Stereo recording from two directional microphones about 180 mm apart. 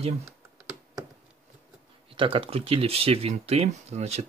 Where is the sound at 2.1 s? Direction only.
30° right (ahead or behind).